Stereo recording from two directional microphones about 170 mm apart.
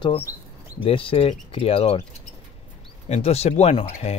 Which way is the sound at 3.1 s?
40° left (ahead or behind).